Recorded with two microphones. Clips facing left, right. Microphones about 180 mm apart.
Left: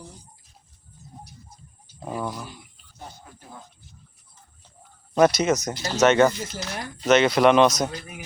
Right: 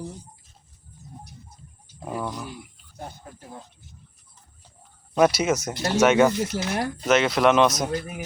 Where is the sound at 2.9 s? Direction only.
55° right (ahead or behind).